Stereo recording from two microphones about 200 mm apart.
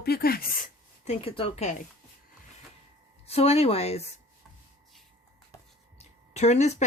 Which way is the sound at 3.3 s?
30° left (ahead or behind).